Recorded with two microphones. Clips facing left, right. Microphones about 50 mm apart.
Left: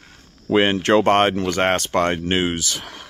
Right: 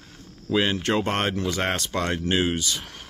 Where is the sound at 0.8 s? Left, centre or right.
Left.